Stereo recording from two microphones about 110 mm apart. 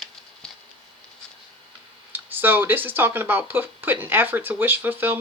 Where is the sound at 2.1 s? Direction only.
20° right (ahead or behind).